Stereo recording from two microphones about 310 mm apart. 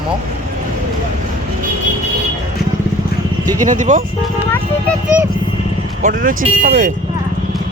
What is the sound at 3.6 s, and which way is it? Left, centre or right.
Speech, right.